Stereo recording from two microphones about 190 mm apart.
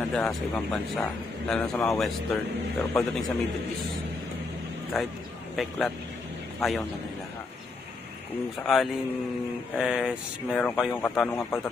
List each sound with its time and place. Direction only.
0.1 s speech: centre (ahead or behind)
4.9 s speech: centre (ahead or behind)
8.7 s speech: centre (ahead or behind)
10.9 s speech: 10° left (ahead or behind)